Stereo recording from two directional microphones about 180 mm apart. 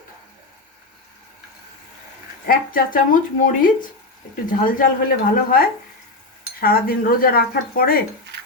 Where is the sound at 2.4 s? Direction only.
55° left (ahead or behind).